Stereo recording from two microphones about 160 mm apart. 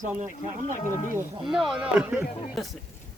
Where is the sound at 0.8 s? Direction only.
50° left (ahead or behind).